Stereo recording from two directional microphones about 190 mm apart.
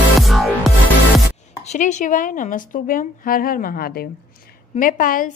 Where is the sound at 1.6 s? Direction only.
40° left (ahead or behind).